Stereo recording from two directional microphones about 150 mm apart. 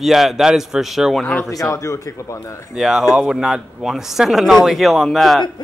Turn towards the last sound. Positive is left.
turn(degrees=0)  # may be behind; listen again after turning